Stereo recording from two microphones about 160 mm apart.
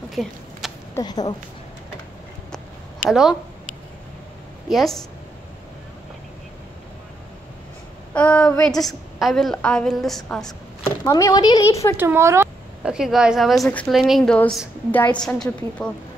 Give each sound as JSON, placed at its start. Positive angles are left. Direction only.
{"t": 0.1, "sound": "a sound", "side_deg": 0}
{"t": 0.9, "sound": "speech", "side_deg": 25}
{"t": 3.1, "sound": "a woman's voice", "side_deg": -5}
{"t": 4.6, "sound": "a woman's voice", "side_deg": 0}
{"t": 8.1, "sound": "a woman's voice", "side_deg": 5}
{"t": 11.1, "sound": "speech", "side_deg": 20}
{"t": 12.0, "sound": "speech", "side_deg": -15}
{"t": 12.8, "sound": "a woman's voice", "side_deg": -5}